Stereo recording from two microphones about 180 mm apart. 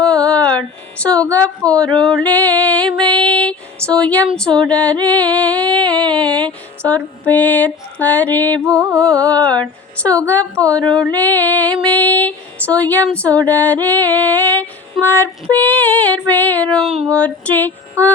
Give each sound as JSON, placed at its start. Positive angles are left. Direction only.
{"t": 0.0, "sound": "music", "side_deg": 5}
{"t": 4.3, "sound": "speech", "side_deg": 5}
{"t": 5.0, "sound": "music", "side_deg": 10}
{"t": 8.6, "sound": "music", "side_deg": -20}
{"t": 9.0, "sound": "music", "side_deg": 5}
{"t": 10.5, "sound": "female singing", "side_deg": -20}
{"t": 11.2, "sound": "music", "side_deg": 10}
{"t": 18.0, "sound": "music", "side_deg": -15}